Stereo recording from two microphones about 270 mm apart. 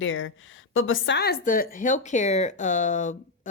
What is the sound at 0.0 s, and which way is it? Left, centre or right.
A woman's voice, left.